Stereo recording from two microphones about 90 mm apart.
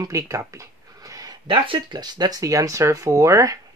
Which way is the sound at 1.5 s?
60° right (ahead or behind).